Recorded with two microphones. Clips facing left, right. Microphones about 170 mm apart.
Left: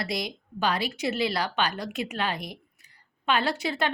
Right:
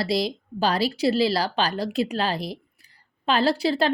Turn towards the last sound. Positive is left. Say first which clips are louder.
# right 6 dB
turn(degrees=-35)  # may be behind; listen again after turning